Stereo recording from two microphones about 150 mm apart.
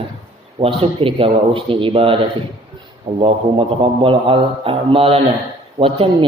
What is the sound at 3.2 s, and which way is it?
Speech, 35° right (ahead or behind).